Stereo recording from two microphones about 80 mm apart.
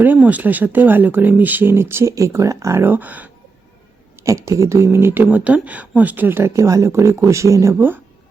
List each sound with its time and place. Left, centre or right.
0.0 s speech: right
2.8 s speech: right
4.2 s speech: right
6.5 s speech: right
7.8 s speech: right